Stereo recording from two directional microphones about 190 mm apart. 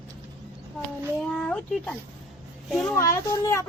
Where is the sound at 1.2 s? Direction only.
5° left (ahead or behind).